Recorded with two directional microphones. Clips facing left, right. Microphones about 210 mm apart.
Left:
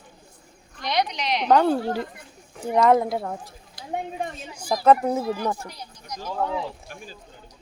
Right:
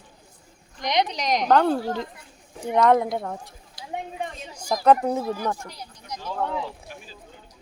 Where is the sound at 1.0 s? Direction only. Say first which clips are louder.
Right 2 dB; 40° right (ahead or behind).